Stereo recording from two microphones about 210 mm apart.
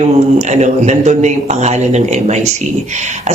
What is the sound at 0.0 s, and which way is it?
Speech, 35° right (ahead or behind).